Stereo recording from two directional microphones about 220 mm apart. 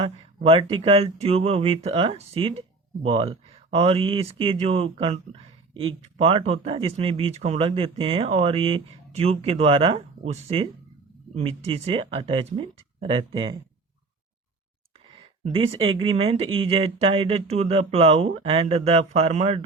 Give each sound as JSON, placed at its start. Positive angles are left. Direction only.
{"t": 0.0, "sound": "speech", "side_deg": -25}
{"t": 15.4, "sound": "speech", "side_deg": -25}